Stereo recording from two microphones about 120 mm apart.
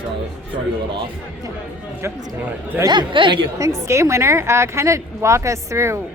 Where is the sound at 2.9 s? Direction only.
40° right (ahead or behind).